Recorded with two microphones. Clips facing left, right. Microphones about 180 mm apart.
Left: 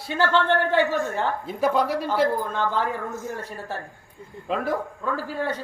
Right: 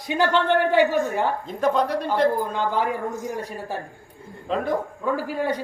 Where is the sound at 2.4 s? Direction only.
15° right (ahead or behind).